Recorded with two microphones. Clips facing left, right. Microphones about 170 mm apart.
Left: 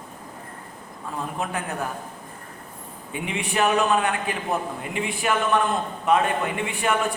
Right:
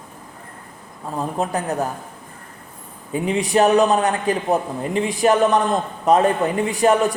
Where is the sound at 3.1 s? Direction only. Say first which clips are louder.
Right 8 dB; 35° right (ahead or behind).